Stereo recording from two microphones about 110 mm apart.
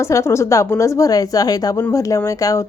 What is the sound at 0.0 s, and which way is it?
A woman's voice, 25° left (ahead or behind).